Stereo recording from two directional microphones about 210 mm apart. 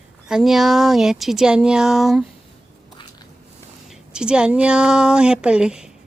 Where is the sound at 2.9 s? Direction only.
20° left (ahead or behind).